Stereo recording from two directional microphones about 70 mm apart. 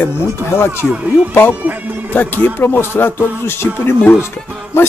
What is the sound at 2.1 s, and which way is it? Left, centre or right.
Speech, left.